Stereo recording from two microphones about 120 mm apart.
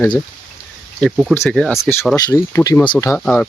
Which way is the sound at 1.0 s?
5° right (ahead or behind).